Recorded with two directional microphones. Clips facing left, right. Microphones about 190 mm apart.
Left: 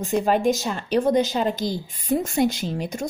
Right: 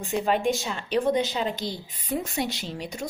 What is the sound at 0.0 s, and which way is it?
Speech, 40° left (ahead or behind).